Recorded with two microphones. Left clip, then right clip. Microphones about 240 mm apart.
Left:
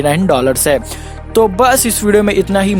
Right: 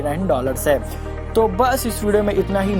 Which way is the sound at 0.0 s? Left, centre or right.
Left.